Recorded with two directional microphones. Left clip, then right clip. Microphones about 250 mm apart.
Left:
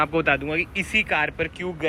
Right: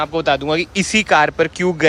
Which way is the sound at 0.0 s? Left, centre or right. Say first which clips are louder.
Right 4 dB; centre.